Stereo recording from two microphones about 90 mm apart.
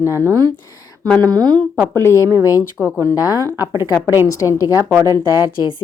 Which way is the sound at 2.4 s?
30° right (ahead or behind).